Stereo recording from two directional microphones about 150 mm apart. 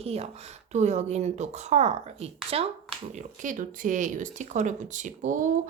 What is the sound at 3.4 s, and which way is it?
Speech, 60° right (ahead or behind).